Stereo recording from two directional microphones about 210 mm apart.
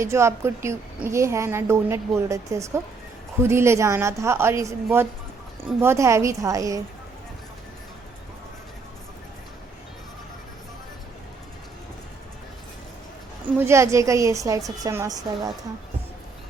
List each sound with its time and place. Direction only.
0.0 s a woman's voice: 15° right (ahead or behind)
13.6 s a woman's voice: 15° right (ahead or behind)